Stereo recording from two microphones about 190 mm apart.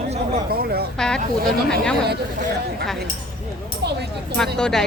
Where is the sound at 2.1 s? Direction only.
55° right (ahead or behind).